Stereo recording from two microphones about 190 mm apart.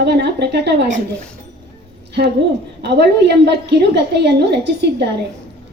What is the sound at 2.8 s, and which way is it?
A woman's voice, 60° right (ahead or behind).